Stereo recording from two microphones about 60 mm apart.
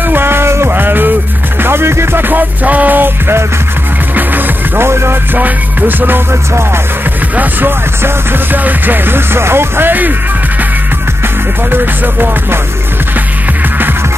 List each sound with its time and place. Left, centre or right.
0.1 s music: right
4.8 s music: right
5.4 s music: right
7.3 s music: right
11.7 s music: right